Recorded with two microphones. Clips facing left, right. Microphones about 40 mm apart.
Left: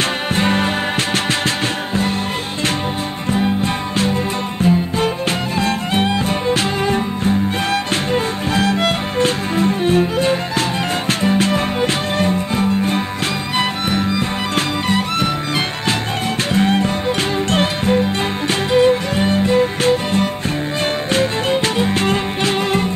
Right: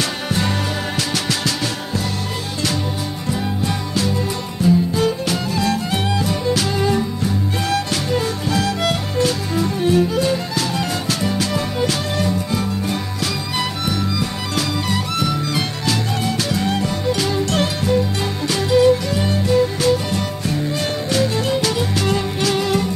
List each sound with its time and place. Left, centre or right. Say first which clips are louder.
0.3 s music: left 6 dB; left
3.3 s music: left 5 dB; left
21.7 s music: left 3 dB; left